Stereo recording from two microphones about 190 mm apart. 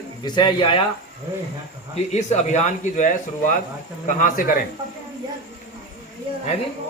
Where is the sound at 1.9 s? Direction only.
35° left (ahead or behind).